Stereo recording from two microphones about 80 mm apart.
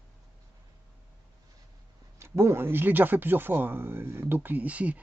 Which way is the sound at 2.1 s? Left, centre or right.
Right.